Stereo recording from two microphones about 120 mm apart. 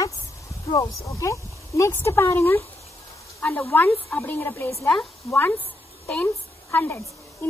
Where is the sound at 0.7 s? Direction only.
30° left (ahead or behind).